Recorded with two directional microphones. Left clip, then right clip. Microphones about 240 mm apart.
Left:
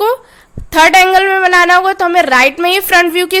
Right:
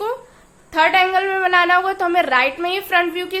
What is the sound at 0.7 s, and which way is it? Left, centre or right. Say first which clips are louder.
A woman's voice: left 8 dB; left.